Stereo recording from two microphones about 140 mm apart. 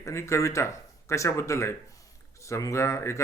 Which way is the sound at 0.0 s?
20° left (ahead or behind).